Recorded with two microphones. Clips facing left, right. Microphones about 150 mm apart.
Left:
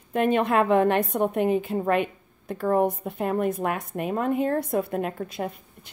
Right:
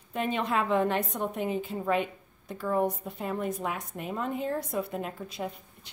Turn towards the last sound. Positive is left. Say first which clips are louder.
# left 4 dB
turn(degrees=55)  # may be behind; listen again after turning